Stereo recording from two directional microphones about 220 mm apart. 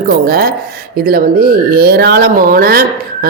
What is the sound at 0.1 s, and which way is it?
Speech, 45° right (ahead or behind).